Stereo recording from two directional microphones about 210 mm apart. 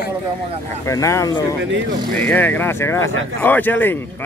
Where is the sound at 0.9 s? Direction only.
15° left (ahead or behind).